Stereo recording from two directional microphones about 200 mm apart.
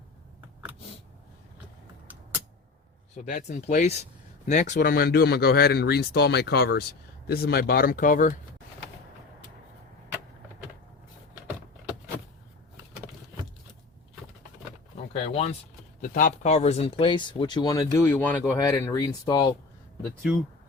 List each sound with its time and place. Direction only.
3.2 s speech: 35° left (ahead or behind)
14.9 s door: 30° left (ahead or behind)
16.0 s speech: 40° left (ahead or behind); by 19.5 s 20° left (ahead or behind)